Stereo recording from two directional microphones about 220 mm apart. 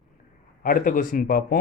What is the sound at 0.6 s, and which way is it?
Speech, 40° left (ahead or behind).